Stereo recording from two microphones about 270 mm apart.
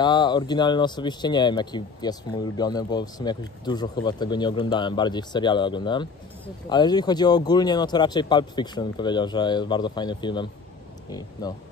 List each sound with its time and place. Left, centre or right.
0.0 s speech: centre